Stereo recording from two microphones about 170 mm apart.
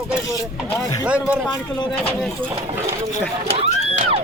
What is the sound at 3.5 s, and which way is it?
Speech, 35° right (ahead or behind).